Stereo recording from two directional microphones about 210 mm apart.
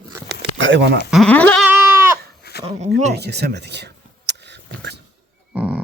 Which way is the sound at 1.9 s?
10° right (ahead or behind).